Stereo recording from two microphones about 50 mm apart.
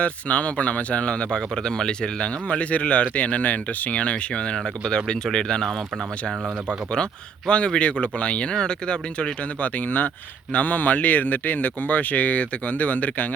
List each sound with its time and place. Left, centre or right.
0.0 s a man's voice: left
6.9 s a man's voice: centre
9.6 s speech: left